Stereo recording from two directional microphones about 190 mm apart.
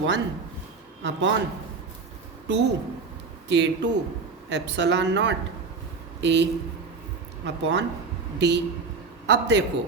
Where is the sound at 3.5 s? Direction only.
70° right (ahead or behind).